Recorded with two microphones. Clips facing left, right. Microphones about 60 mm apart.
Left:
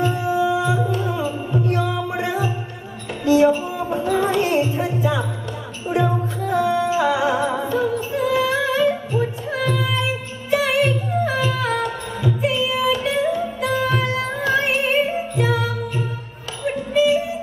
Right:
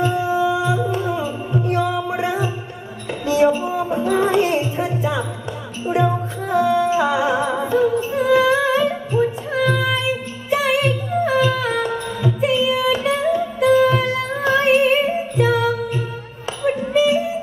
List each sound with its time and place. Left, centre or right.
0.0 s music: right
0.6 s music: left
0.9 s music: right